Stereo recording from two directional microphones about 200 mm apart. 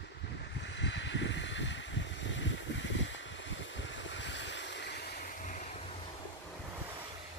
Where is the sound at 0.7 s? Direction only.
60° left (ahead or behind).